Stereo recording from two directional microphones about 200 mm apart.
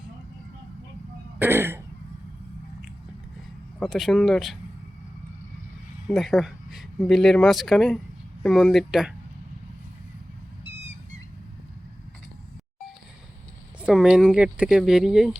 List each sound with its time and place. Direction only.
1.4 s throat clearing: 10° right (ahead or behind)
3.8 s speech: centre (ahead or behind)
6.1 s speech: centre (ahead or behind)
10.6 s vehicle: 60° right (ahead or behind)
13.8 s speech: 5° right (ahead or behind)